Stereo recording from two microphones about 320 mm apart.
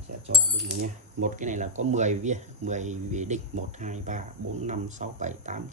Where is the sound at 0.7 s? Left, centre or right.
Right.